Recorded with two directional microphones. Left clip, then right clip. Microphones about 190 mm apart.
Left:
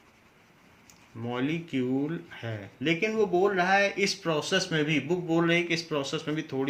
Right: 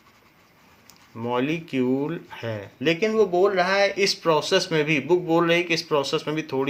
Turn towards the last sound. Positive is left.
turn(degrees=-50)  # may be behind; listen again after turning